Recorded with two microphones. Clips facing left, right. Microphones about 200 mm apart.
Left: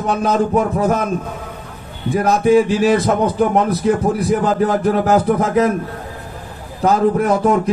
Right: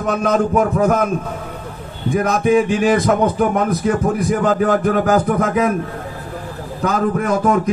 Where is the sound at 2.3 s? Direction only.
30° left (ahead or behind).